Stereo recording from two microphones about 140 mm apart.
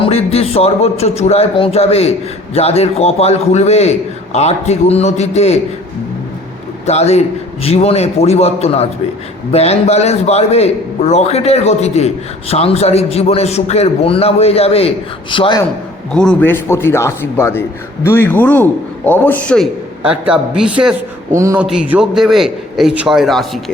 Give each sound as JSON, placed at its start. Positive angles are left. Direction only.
{"t": 0.0, "sound": "a man's voice", "side_deg": 45}
{"t": 6.8, "sound": "a man's voice", "side_deg": 50}
{"t": 16.1, "sound": "a man's voice", "side_deg": 5}
{"t": 20.0, "sound": "a man's voice", "side_deg": -10}
{"t": 21.3, "sound": "speech", "side_deg": -20}
{"t": 21.6, "sound": "a man's voice", "side_deg": -5}